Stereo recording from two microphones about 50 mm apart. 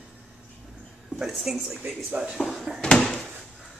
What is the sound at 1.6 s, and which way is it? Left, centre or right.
Speech, centre.